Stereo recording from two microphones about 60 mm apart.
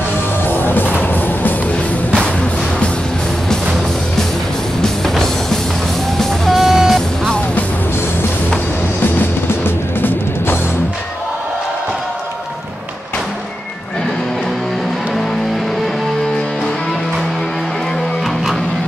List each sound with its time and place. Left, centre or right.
0.5 s music: left
4.8 s music: centre
10.0 s music: left